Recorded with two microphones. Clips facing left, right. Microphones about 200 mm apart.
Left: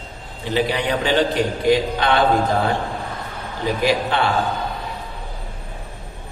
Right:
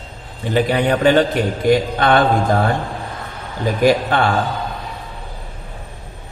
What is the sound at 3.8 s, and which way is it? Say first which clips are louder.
Speech: right 5 dB; 50° right (ahead or behind).